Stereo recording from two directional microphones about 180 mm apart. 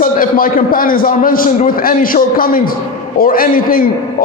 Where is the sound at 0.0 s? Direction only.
50° left (ahead or behind).